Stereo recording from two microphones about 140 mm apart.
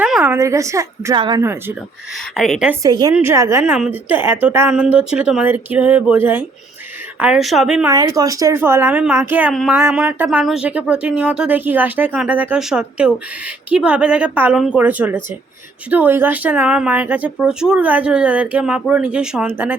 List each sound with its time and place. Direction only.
0.0 s a sound: 10° right (ahead or behind)
0.3 s a woman's voice: 20° right (ahead or behind)
1.1 s speech: 35° right (ahead or behind)
1.4 s speech: 15° right (ahead or behind)
2.3 s speech: centre (ahead or behind)
2.8 s a woman's voice: 30° right (ahead or behind)
3.2 s speech: 20° right (ahead or behind)
7.9 s speech: 25° right (ahead or behind)
9.5 s speech: centre (ahead or behind)
9.9 s speech: 10° right (ahead or behind)